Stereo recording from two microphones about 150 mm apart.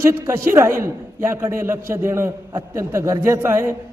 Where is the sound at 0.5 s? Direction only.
15° right (ahead or behind).